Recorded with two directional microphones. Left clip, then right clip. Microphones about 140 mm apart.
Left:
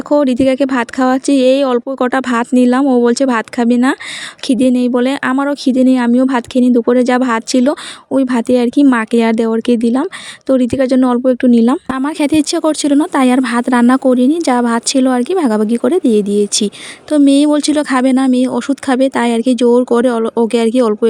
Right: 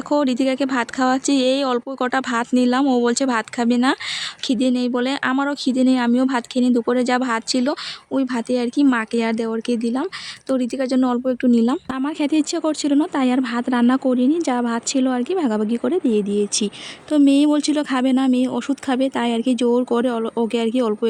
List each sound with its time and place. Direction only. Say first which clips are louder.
0.1 s speech: left 8 dB; 35° left (ahead or behind)